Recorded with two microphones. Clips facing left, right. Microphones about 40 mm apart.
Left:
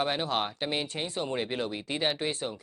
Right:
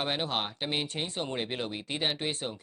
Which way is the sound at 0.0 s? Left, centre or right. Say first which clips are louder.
Left 2 dB; centre.